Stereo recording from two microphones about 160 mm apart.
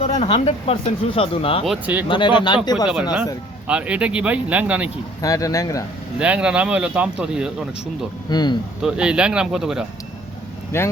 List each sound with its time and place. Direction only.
0.2 s speech: 35° left (ahead or behind)
1.6 s speech: 5° right (ahead or behind)
2.0 s speech: 30° left (ahead or behind)
3.7 s speech: 5° right (ahead or behind)
5.2 s speech: 20° left (ahead or behind)
6.1 s speech: 5° right (ahead or behind)
8.3 s speech: 25° left (ahead or behind)
8.8 s speech: 5° right (ahead or behind)
10.7 s speech: 15° left (ahead or behind)